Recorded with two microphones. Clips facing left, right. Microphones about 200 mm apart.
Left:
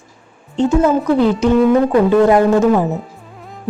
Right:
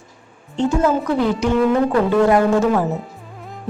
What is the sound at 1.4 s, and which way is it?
Speech, 20° left (ahead or behind).